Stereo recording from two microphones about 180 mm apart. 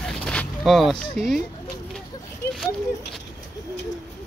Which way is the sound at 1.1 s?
Centre (ahead or behind).